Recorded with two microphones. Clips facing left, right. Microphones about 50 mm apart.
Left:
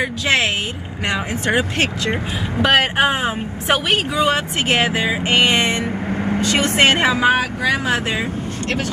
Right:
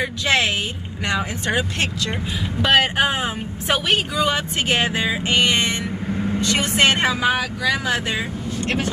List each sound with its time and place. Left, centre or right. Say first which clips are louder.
0.0 s vehicle: left 2 dB; centre
1.0 s speech: left 2 dB; left
2.6 s speech: left 2 dB; left
4.7 s music: left 3 dB; centre
5.4 s vehicle: left 4 dB; left
7.0 s speech: left 4 dB; left
8.6 s speech: even; centre